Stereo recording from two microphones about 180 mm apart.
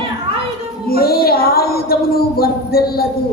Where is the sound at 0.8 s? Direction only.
55° left (ahead or behind).